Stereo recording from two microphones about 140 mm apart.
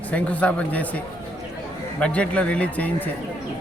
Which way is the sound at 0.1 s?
10° left (ahead or behind).